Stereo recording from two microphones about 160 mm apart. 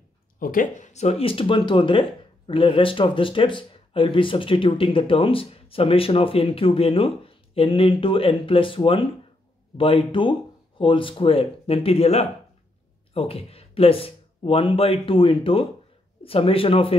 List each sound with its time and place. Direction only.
0.4 s speech: 60° left (ahead or behind); by 16.9 s 35° left (ahead or behind)